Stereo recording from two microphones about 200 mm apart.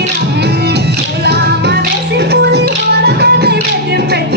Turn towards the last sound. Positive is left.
turn(degrees=-55)  # may be behind; listen again after turning